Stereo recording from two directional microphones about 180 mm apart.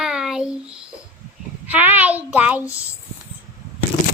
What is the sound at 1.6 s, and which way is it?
A child's voice, 10° right (ahead or behind).